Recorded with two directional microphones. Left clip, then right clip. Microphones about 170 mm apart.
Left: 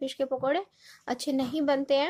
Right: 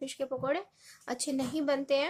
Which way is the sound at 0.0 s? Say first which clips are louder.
Left 5 dB; 25° left (ahead or behind).